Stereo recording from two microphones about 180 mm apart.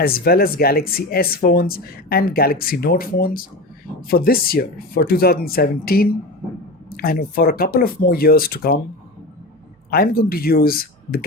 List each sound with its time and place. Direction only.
0.0 s speech: 55° left (ahead or behind)
9.9 s speech: 55° left (ahead or behind)